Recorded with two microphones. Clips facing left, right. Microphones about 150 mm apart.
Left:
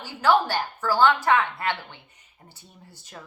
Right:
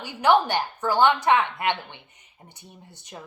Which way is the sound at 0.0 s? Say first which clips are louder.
Right 1 dB; 20° right (ahead or behind).